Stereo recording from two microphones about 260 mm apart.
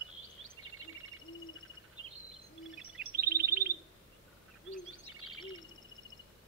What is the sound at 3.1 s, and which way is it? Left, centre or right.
Bird, right.